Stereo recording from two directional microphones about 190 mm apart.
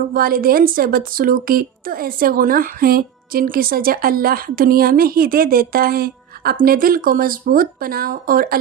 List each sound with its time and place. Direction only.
0.1 s a woman's voice: 50° right (ahead or behind)